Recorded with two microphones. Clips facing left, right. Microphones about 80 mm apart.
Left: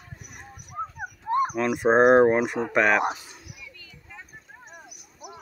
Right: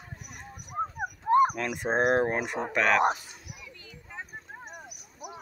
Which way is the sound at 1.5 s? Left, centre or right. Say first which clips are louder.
Left 8 dB; centre.